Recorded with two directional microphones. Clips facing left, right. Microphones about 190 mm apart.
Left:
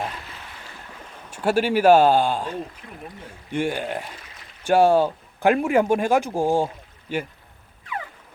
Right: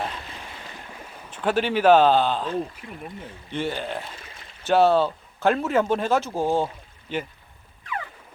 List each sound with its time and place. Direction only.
1.3 s speech: 10° left (ahead or behind)
2.8 s speech: 5° right (ahead or behind)
3.5 s speech: 15° left (ahead or behind)
4.2 s a sound: 25° right (ahead or behind)
4.6 s speech: 10° left (ahead or behind)